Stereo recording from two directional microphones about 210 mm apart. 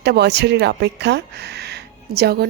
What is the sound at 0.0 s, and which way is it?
A woman's voice, 55° right (ahead or behind).